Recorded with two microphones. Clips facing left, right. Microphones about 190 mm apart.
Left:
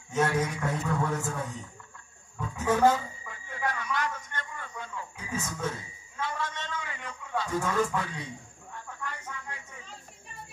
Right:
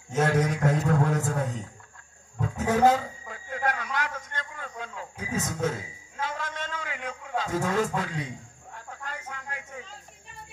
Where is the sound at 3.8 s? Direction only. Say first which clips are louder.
Even; 70° right (ahead or behind).